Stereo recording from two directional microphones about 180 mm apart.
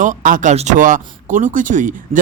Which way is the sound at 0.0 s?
45° right (ahead or behind).